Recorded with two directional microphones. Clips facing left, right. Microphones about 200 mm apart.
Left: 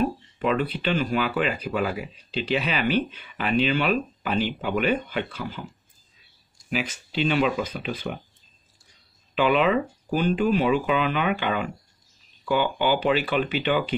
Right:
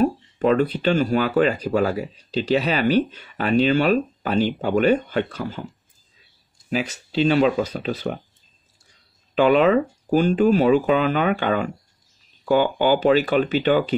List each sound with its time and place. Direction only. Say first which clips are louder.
0.0 s speech: right 5 dB; 45° right (ahead or behind)
6.7 s speech: right 4 dB; 35° right (ahead or behind)
9.3 s speech: right 5 dB; 45° right (ahead or behind)